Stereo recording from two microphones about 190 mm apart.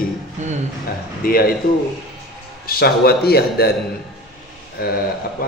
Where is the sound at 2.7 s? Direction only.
55° left (ahead or behind).